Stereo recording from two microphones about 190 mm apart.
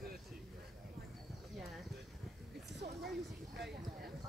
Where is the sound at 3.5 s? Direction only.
65° right (ahead or behind).